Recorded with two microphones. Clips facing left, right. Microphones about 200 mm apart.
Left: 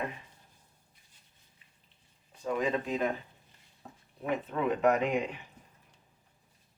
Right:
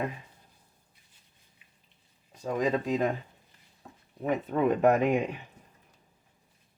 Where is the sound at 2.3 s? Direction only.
40° right (ahead or behind).